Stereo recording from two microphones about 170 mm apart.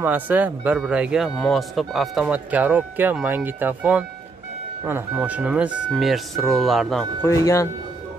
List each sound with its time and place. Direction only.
0.0 s speech: 10° right (ahead or behind)
7.2 s speech: 15° left (ahead or behind)